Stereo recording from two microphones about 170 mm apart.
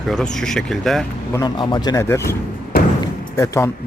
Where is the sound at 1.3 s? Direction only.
25° left (ahead or behind).